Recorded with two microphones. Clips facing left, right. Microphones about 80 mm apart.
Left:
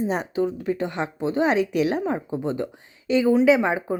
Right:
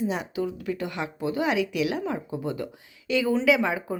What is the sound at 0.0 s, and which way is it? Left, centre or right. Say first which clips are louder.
A woman's voice: left 4 dB; left.